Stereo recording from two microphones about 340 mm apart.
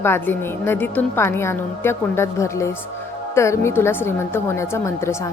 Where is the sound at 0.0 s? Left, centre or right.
Centre.